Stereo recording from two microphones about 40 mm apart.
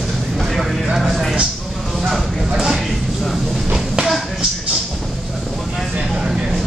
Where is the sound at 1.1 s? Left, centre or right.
Centre.